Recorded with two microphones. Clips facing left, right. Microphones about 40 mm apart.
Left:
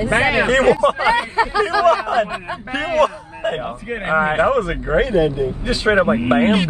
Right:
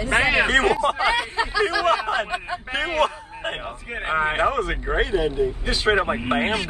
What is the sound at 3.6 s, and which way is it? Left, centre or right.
Speech, centre.